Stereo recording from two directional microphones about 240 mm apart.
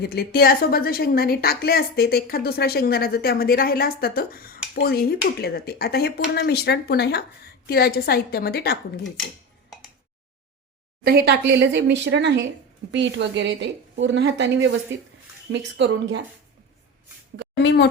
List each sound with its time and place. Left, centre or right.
0.0 s a woman's voice: left
11.0 s a woman's voice: right
17.6 s speech: left